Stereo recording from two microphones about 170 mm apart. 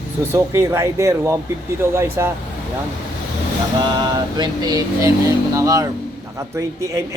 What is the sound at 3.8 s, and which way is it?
Music, 25° right (ahead or behind).